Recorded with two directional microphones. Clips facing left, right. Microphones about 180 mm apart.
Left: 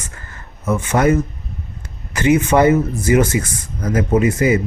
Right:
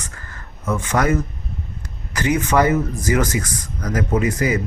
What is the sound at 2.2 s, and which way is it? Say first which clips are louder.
Speech: left 4 dB; 25° left (ahead or behind).